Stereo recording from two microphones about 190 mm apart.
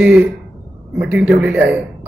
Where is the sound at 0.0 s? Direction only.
5° right (ahead or behind).